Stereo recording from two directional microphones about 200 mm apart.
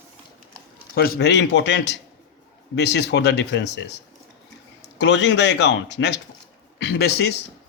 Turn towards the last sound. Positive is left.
turn(degrees=55)  # may be behind; listen again after turning